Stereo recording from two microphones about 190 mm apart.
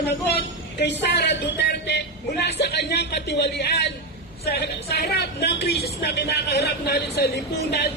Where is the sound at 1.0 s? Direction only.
65° left (ahead or behind).